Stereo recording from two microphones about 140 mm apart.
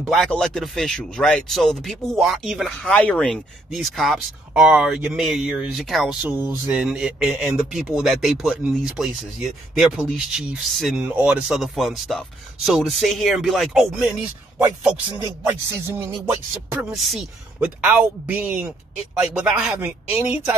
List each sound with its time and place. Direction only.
0.0 s speech: centre (ahead or behind)
6.2 s speech: 15° right (ahead or behind); by 11.0 s centre (ahead or behind)
11.0 s speech: 10° right (ahead or behind)
15.1 s speech: 20° right (ahead or behind)
16.7 s speech: centre (ahead or behind)
17.8 s speech: 10° right (ahead or behind)